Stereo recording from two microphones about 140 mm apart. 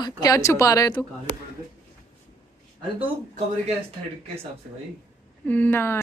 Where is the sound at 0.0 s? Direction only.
25° left (ahead or behind).